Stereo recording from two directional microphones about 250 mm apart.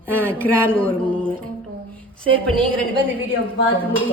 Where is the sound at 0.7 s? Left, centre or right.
Centre.